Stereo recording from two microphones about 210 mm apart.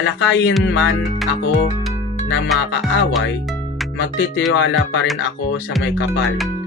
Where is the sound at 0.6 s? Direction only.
55° left (ahead or behind).